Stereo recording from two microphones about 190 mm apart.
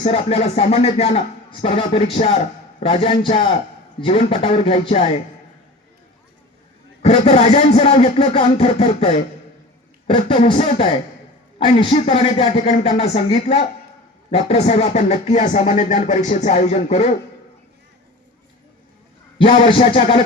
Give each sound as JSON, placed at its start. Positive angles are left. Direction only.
{"t": 0.3, "sound": "music", "side_deg": 35}
{"t": 2.8, "sound": "speech", "side_deg": 30}
{"t": 4.0, "sound": "music", "side_deg": 30}
{"t": 7.0, "sound": "music", "side_deg": 35}
{"t": 10.1, "sound": "speech", "side_deg": 25}
{"t": 10.4, "sound": "music", "side_deg": 30}
{"t": 19.4, "sound": "speech", "side_deg": 30}